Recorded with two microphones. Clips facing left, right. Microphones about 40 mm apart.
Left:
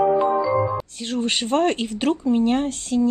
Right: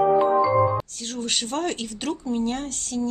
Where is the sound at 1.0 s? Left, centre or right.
Left.